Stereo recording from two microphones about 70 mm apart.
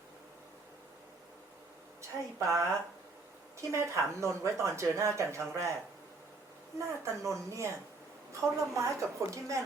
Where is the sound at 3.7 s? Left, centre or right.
Right.